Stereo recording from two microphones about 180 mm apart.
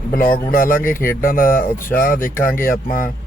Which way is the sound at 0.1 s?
50° left (ahead or behind).